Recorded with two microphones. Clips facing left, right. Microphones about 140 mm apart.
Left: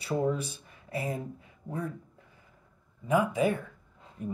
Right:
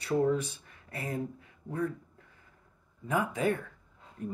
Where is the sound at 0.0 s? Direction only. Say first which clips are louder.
Right 2 dB; 15° left (ahead or behind).